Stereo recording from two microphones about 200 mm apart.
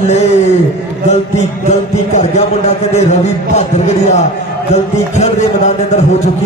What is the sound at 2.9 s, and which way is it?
Speech, 35° left (ahead or behind).